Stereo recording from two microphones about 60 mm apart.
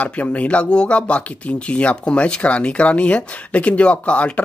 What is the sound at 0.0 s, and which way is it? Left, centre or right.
Speech, left.